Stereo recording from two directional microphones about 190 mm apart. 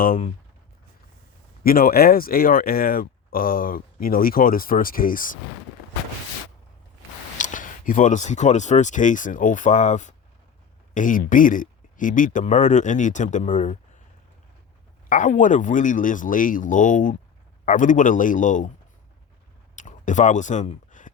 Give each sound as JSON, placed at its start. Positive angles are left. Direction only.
{"t": 1.6, "sound": "speech", "side_deg": 50}
{"t": 7.3, "sound": "speech", "side_deg": 45}
{"t": 15.1, "sound": "speech", "side_deg": 40}
{"t": 19.7, "sound": "a sound", "side_deg": 40}